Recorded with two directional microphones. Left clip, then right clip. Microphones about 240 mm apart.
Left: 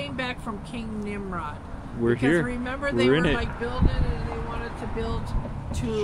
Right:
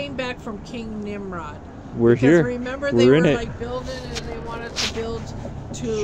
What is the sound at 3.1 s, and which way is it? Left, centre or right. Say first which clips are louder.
Speech: right 6 dB; right.